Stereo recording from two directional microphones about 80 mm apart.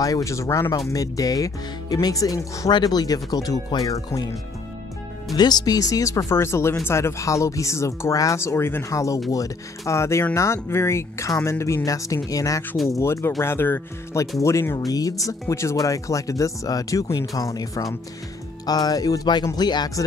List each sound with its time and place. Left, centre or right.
0.0 s speech: left
2.7 s speech: left
5.3 s speech: left
14.4 s speech: left
14.9 s speech: left